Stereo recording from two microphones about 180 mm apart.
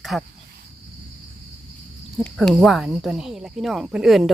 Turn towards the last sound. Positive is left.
turn(degrees=0)  # may be behind; listen again after turning